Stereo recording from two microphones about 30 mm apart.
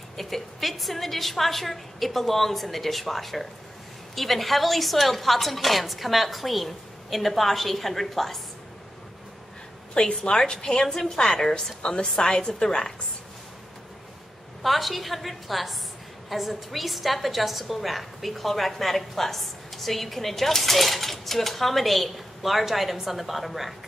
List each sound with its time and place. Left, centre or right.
0.2 s a woman's voice: centre
9.9 s a woman's voice: left
10.9 s a woman's voice: centre
11.8 s a woman's voice: left
14.6 s a woman's voice: centre